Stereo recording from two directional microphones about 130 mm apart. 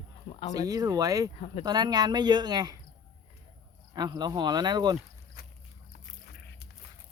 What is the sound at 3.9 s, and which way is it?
Speech, 30° right (ahead or behind).